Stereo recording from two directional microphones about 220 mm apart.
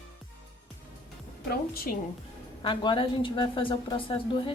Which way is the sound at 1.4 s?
45° left (ahead or behind).